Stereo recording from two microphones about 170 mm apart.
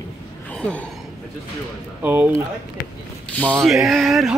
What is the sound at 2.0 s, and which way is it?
Speech, 10° right (ahead or behind).